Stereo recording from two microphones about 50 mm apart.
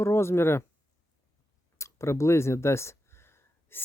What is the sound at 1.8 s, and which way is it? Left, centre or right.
Speech, left.